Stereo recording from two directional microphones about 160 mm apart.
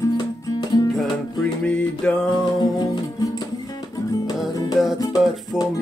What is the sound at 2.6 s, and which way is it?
Music, 25° left (ahead or behind).